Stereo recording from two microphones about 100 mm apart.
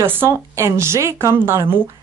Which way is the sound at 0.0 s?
20° right (ahead or behind).